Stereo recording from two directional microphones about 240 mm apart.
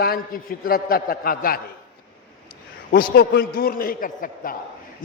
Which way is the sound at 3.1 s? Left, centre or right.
Left.